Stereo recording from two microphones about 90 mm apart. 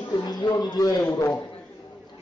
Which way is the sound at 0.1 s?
55° left (ahead or behind).